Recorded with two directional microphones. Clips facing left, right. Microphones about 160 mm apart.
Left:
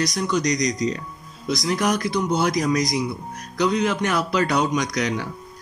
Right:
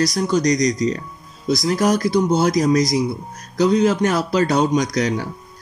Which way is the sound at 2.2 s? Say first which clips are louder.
Right 4 dB; 40° right (ahead or behind).